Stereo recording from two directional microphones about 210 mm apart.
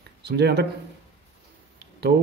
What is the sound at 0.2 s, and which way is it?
Speech, 50° right (ahead or behind).